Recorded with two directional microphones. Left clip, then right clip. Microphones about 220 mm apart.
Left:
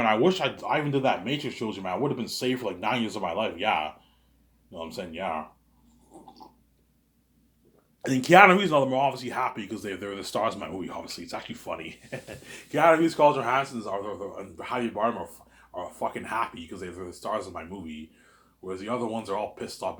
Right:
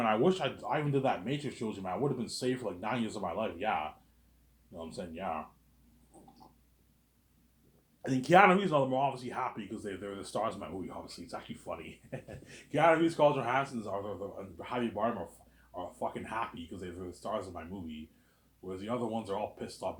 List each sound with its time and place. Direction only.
0.0 s speech: 20° left (ahead or behind)
8.0 s speech: 30° left (ahead or behind)